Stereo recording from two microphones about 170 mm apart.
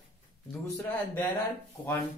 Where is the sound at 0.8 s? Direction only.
10° left (ahead or behind).